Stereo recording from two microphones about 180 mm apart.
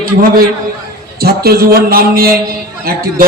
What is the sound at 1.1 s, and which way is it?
A man's voice, 55° right (ahead or behind).